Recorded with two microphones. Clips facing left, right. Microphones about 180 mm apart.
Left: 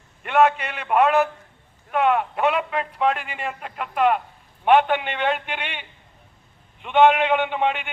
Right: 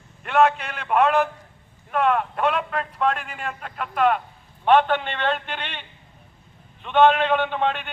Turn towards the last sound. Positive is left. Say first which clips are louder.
# left 1 dB
turn(degrees=15)  # may be behind; listen again after turning